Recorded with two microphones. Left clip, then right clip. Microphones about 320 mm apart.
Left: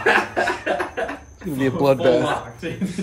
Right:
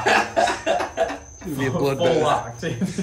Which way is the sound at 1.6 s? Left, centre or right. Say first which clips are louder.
Left 4 dB; centre.